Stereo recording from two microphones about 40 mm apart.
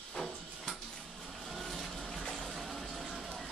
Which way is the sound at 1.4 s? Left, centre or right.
Centre.